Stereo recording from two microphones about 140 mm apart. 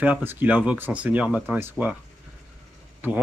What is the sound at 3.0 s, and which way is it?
Speech, 15° right (ahead or behind).